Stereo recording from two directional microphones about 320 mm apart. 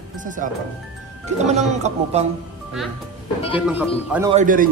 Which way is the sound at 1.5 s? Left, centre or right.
Right.